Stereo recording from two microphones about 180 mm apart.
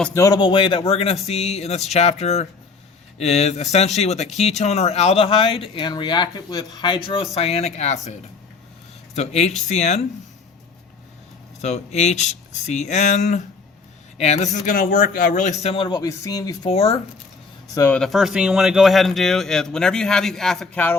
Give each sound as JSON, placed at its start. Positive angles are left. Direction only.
{"t": 0.1, "sound": "speech", "side_deg": 15}
{"t": 9.1, "sound": "speech", "side_deg": 35}
{"t": 11.6, "sound": "a man's voice", "side_deg": 40}
{"t": 15.7, "sound": "speech", "side_deg": 30}
{"t": 16.6, "sound": "speech", "side_deg": 30}
{"t": 17.7, "sound": "speech", "side_deg": 10}